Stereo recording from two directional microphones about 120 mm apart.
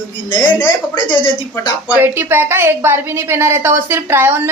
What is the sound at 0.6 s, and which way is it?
A woman's voice, 40° left (ahead or behind).